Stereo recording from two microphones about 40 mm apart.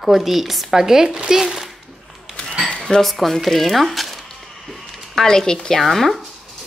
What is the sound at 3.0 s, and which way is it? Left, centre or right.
Speech, centre.